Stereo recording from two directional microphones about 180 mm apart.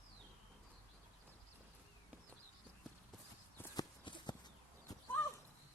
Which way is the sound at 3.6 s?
25° left (ahead or behind).